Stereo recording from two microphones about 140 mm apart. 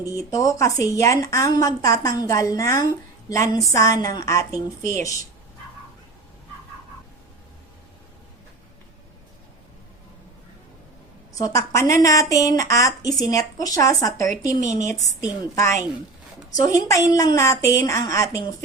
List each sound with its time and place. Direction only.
0.2 s speech: 25° left (ahead or behind)
11.3 s speech: 25° left (ahead or behind)